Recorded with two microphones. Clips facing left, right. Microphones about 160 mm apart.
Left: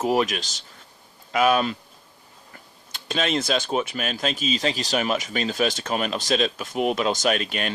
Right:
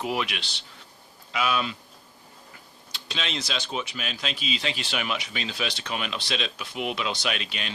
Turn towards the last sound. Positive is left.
turn(degrees=50)  # may be behind; listen again after turning